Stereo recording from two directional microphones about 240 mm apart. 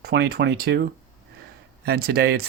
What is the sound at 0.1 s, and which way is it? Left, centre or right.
Speech, right.